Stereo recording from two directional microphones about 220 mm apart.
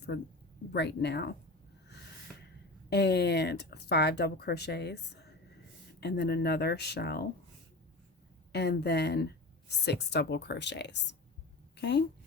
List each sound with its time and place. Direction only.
0.7 s a woman's voice: 50° left (ahead or behind)
2.9 s a woman's voice: 50° left (ahead or behind)
8.5 s a woman's voice: 45° left (ahead or behind)